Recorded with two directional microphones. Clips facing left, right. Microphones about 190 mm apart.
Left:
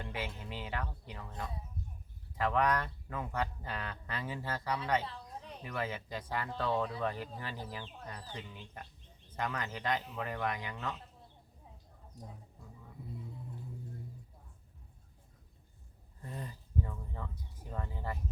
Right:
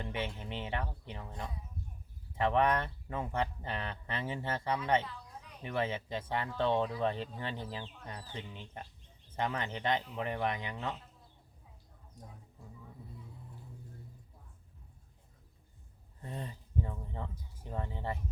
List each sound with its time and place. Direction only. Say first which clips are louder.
0.0 s speech: right 3 dB; 25° right (ahead or behind)
5.0 s a sound: left 3 dB; 30° left (ahead or behind)
5.6 s speech: right 4 dB; 25° right (ahead or behind)
16.2 s speech: right 2 dB; 25° right (ahead or behind)